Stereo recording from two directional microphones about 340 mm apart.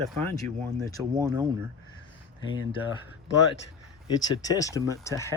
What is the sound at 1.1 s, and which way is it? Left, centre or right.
Speech, centre.